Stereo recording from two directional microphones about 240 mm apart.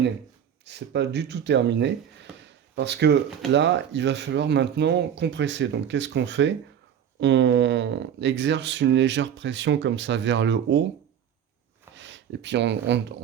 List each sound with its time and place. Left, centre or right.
0.6 s speech: right
2.4 s a sound: right
3.5 s speech: right
11.9 s speech: right